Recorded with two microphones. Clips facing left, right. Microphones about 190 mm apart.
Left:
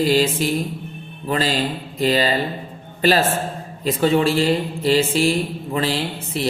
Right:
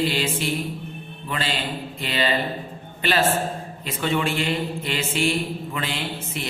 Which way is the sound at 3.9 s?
35° left (ahead or behind).